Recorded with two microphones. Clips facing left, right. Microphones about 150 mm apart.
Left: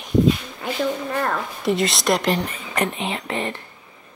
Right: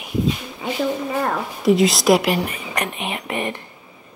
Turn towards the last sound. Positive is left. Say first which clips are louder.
# right 1 dB
turn(degrees=-15)  # may be behind; listen again after turning